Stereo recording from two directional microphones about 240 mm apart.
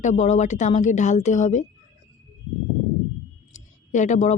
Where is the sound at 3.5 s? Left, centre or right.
Left.